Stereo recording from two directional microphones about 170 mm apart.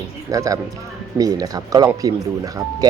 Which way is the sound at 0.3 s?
20° right (ahead or behind).